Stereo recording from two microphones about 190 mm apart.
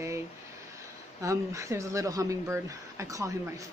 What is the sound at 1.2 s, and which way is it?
Speech, 15° right (ahead or behind).